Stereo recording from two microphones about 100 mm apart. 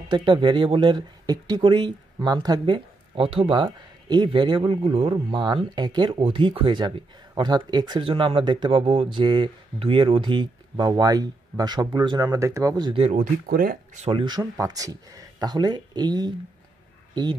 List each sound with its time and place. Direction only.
0.1 s speech: 50° right (ahead or behind)
2.3 s speech: 40° right (ahead or behind)
2.6 s a man's voice: 60° right (ahead or behind)
5.1 s speech: 50° right (ahead or behind)
6.2 s speech: 65° right (ahead or behind)
7.3 s speech: 45° right (ahead or behind)
8.0 s speech: 65° right (ahead or behind)
9.2 s speech: 50° right (ahead or behind)
9.8 s speech: 65° right (ahead or behind); by 12.7 s 30° right (ahead or behind)
14.2 s speech: 45° right (ahead or behind)